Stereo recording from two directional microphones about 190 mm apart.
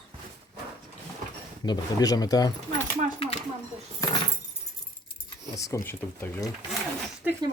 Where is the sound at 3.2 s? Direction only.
30° left (ahead or behind).